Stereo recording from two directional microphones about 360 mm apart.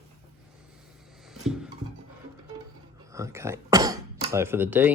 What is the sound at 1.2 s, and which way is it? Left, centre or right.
Music, centre.